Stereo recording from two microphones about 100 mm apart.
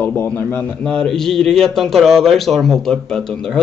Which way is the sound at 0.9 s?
5° left (ahead or behind).